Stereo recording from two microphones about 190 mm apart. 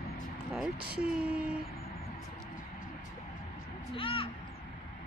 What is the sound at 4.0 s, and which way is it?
Speech, 30° left (ahead or behind).